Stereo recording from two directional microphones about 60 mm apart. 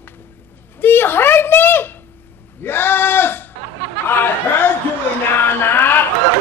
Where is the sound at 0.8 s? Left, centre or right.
Left.